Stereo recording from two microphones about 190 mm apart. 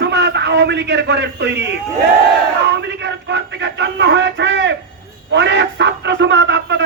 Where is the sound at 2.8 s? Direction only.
65° right (ahead or behind).